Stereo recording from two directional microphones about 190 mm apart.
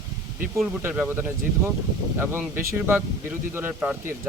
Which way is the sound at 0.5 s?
5° right (ahead or behind).